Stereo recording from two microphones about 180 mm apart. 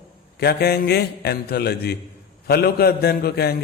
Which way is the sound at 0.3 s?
60° left (ahead or behind).